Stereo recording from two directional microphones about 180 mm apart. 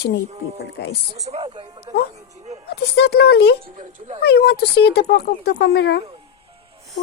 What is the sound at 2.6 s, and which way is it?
Speech, 65° left (ahead or behind).